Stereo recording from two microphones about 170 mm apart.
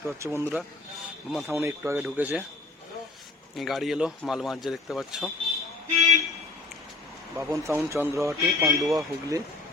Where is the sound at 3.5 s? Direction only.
Centre (ahead or behind).